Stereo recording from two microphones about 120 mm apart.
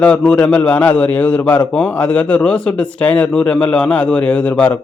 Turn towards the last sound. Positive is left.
turn(degrees=10)  # may be behind; listen again after turning